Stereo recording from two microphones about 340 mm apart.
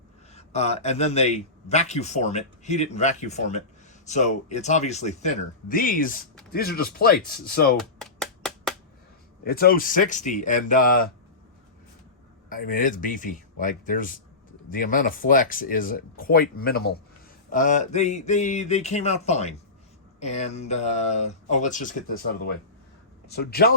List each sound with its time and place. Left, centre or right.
0.3 s speech: centre
7.8 s a sound: centre
9.4 s speech: left
12.5 s speech: left
23.3 s speech: left